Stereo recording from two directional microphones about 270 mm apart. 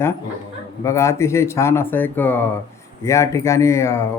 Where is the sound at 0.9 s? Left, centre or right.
Centre.